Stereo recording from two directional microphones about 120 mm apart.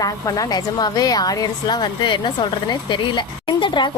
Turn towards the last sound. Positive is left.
turn(degrees=40)  # may be behind; listen again after turning